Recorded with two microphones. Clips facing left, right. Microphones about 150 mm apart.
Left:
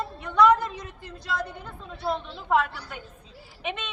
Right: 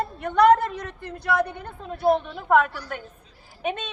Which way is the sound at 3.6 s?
40° right (ahead or behind).